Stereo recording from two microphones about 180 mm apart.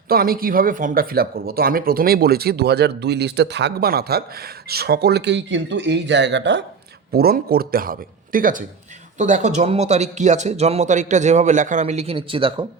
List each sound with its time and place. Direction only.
0.1 s speech: 55° right (ahead or behind); by 6.7 s 75° right (ahead or behind)
7.1 s speech: 55° right (ahead or behind); by 12.6 s 30° right (ahead or behind)